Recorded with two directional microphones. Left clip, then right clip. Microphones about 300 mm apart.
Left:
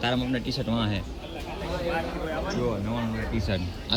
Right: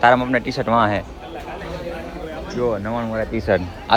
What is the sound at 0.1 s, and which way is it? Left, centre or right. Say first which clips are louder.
Speech: right 12 dB; right.